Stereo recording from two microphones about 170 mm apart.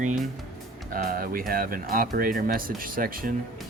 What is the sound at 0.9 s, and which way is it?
Speech, 60° right (ahead or behind).